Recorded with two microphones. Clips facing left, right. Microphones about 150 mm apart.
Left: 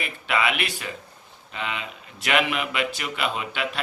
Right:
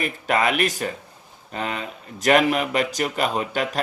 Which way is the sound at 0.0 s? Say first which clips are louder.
Right 4 dB; 45° right (ahead or behind).